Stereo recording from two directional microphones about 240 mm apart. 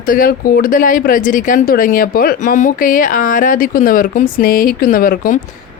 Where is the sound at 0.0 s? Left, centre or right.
Left.